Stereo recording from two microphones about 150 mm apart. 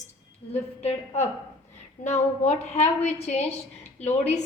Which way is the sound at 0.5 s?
45° left (ahead or behind).